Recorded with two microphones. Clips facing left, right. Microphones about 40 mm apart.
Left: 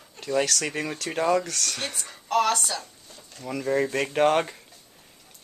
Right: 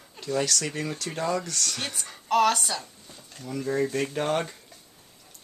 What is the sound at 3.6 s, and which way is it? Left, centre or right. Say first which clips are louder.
Speech: left 2 dB; left.